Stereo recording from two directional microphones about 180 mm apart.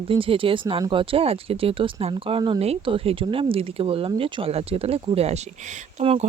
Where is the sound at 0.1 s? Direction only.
30° right (ahead or behind).